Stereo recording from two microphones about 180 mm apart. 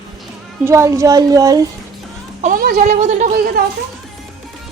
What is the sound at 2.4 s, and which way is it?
A woman's voice, 50° right (ahead or behind).